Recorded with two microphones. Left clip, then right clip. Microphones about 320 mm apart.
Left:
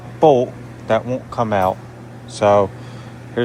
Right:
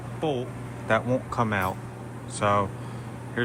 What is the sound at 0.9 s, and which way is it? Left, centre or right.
Speech, centre.